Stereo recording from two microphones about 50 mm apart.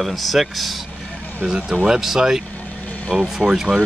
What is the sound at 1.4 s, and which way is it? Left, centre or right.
Speech, centre.